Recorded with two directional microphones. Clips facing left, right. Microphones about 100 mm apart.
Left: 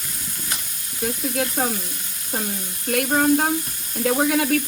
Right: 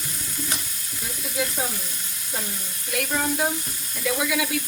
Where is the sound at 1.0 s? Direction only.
55° left (ahead or behind).